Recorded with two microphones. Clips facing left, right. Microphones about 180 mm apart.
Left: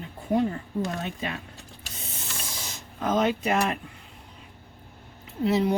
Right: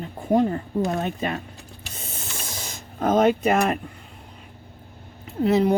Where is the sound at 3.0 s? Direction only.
50° right (ahead or behind).